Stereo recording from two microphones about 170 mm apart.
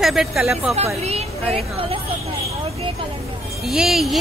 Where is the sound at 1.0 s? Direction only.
35° right (ahead or behind).